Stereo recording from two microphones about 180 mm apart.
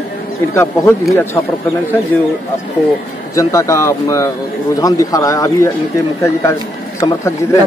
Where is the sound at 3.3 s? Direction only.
15° left (ahead or behind).